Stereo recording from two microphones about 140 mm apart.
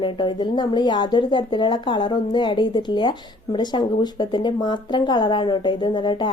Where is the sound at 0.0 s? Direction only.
35° left (ahead or behind).